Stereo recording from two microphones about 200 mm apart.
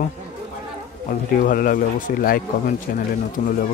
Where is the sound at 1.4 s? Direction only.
45° left (ahead or behind).